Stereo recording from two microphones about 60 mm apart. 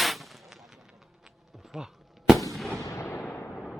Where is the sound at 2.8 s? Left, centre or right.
Left.